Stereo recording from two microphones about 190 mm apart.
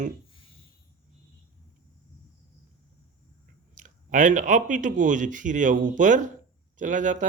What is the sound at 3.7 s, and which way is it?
Speech, 40° right (ahead or behind).